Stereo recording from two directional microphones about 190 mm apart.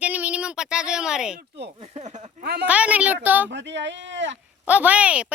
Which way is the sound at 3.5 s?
65° right (ahead or behind).